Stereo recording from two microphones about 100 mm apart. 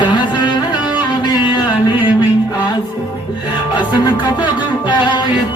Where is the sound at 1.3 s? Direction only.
50° left (ahead or behind).